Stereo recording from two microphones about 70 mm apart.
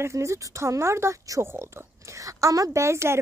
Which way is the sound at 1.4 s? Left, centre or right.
Right.